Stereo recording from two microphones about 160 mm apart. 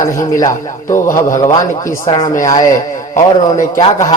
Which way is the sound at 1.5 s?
25° left (ahead or behind).